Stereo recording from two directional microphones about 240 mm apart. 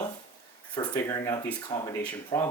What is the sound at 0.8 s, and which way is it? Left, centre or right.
Speech, centre.